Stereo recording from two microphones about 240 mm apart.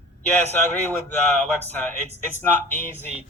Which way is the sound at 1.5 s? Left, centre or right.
Centre.